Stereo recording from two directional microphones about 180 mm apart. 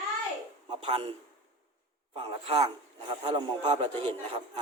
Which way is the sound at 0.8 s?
30° right (ahead or behind).